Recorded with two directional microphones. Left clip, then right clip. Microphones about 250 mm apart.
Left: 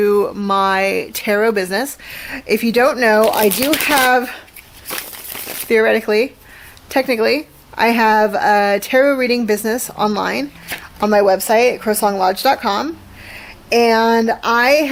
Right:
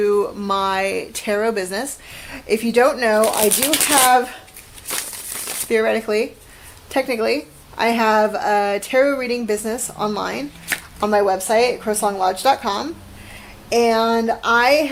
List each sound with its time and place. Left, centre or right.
0.0 s speech: left
5.6 s speech: left